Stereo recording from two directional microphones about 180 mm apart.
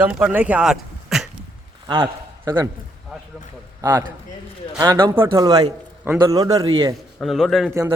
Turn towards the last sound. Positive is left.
turn(degrees=0)  # may be behind; listen again after turning